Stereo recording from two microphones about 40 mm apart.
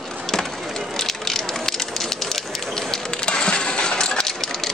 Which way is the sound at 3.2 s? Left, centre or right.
Left.